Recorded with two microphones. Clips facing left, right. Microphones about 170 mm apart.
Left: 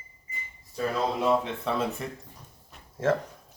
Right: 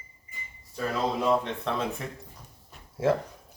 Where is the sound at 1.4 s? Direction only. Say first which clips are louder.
Left 1 dB; 5° left (ahead or behind).